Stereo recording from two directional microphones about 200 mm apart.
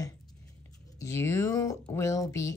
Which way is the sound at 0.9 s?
15° left (ahead or behind).